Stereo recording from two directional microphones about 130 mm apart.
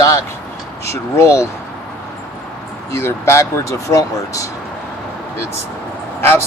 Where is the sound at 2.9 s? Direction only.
20° left (ahead or behind).